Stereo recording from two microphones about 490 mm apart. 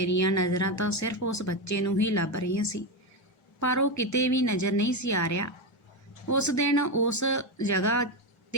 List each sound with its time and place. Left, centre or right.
0.0 s speech: left